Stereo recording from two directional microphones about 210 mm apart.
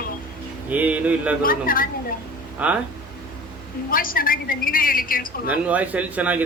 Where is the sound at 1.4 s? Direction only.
40° left (ahead or behind).